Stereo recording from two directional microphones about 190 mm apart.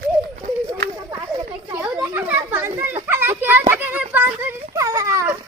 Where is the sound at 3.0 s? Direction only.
10° right (ahead or behind).